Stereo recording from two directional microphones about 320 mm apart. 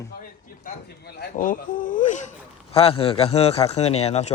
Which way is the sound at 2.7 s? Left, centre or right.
Centre.